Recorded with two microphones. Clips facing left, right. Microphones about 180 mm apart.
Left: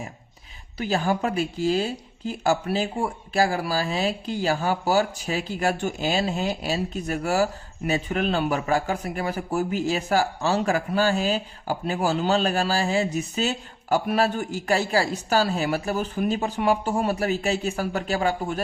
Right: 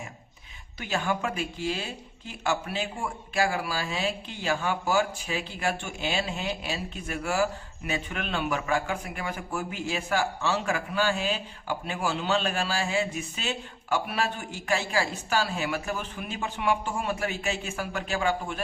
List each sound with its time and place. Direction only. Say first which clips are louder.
0.8 s speech: left 5 dB; 35° left (ahead or behind)